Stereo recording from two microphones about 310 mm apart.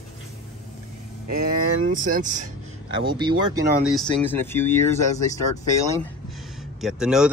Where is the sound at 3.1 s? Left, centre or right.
Centre.